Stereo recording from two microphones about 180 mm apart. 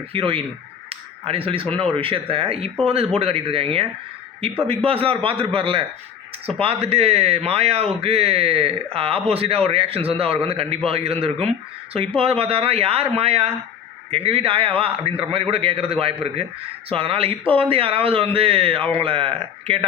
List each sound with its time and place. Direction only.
0.1 s speech: 30° right (ahead or behind)
0.9 s a sound: 30° right (ahead or behind)
1.7 s a man's voice: 30° right (ahead or behind)
6.8 s a man's voice: 35° right (ahead or behind)